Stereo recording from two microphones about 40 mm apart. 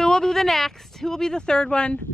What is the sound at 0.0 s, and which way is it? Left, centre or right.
Speech, centre.